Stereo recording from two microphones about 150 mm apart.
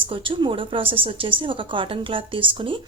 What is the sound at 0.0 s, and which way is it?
A woman's voice, 35° right (ahead or behind).